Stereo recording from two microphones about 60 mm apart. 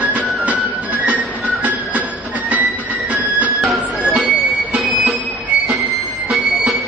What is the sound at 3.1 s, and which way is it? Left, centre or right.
Music, right.